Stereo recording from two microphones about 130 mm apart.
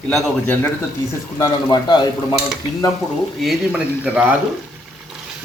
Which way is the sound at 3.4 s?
5° right (ahead or behind).